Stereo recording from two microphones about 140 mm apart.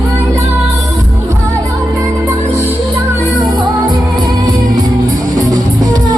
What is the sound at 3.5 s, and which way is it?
Music, 30° right (ahead or behind).